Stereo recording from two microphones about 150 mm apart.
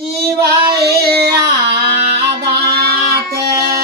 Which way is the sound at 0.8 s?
90° right.